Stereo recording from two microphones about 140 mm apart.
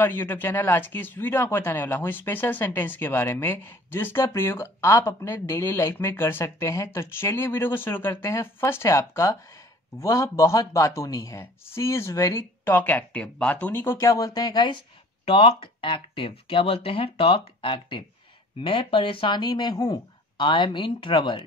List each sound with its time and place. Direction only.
0.0 s a man's voice: 15° left (ahead or behind); by 21.5 s 35° left (ahead or behind)